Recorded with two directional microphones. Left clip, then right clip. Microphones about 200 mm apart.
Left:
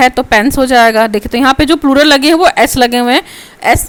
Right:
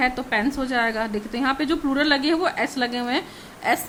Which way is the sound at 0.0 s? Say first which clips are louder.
Left 14 dB; 50° left (ahead or behind).